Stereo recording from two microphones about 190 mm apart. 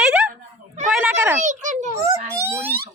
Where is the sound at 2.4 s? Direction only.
15° right (ahead or behind).